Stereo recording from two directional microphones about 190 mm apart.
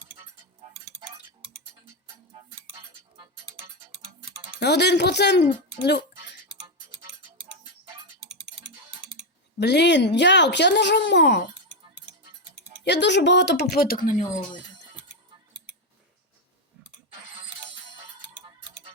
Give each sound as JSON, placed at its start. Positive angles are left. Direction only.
{"t": 4.6, "sound": "speech", "side_deg": 60}
{"t": 5.8, "sound": "music", "side_deg": 60}
{"t": 8.2, "sound": "a sound", "side_deg": -5}
{"t": 9.6, "sound": "speech", "side_deg": 65}
{"t": 12.8, "sound": "speech", "side_deg": 65}